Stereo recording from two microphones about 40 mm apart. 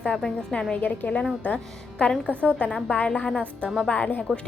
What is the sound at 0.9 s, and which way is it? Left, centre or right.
A woman's voice, left.